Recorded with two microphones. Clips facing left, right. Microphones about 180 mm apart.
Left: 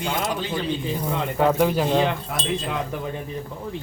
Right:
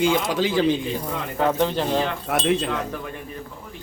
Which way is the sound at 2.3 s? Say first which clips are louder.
Right 6 dB; 75° right (ahead or behind).